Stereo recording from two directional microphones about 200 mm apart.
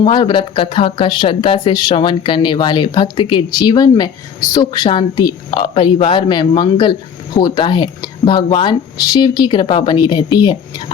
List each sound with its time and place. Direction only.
0.0 s speech: 25° left (ahead or behind)